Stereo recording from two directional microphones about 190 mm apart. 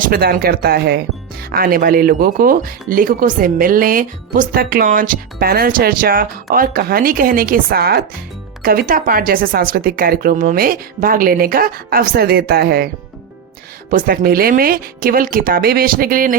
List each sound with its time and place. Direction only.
0.0 s speech: 50° right (ahead or behind)
13.9 s speech: 50° right (ahead or behind)